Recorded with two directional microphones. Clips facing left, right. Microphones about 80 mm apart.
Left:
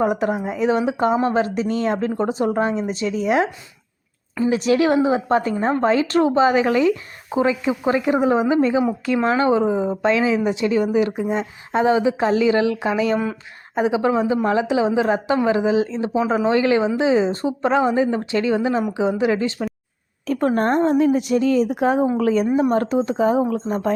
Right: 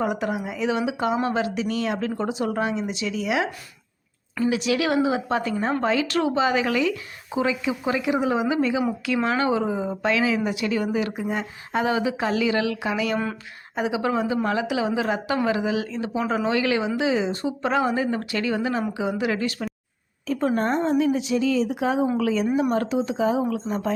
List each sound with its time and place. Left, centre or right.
0.0 s a woman's voice: left
17.7 s a woman's voice: left
20.2 s a woman's voice: left